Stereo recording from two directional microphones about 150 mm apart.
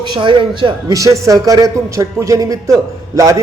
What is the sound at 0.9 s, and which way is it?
A man's voice, 20° right (ahead or behind).